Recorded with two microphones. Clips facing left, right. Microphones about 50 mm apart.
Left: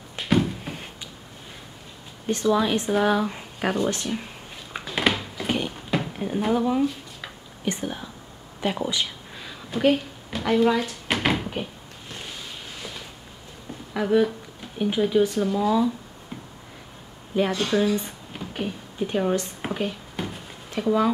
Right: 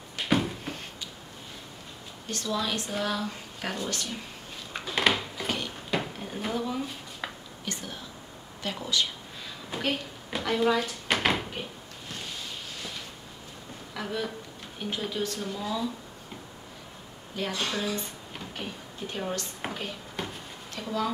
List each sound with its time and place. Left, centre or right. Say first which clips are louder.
0.2 s a sound: left 4 dB; centre
2.2 s speech: left 9 dB; left
4.7 s a sound: left 2 dB; centre
6.1 s speech: left 8 dB; centre
9.8 s cupboard open or close: left 10 dB; centre
13.9 s speech: left 12 dB; centre
17.5 s speech: left 6 dB; centre
19.4 s a sound: left 7 dB; centre
20.7 s speech: left 9 dB; left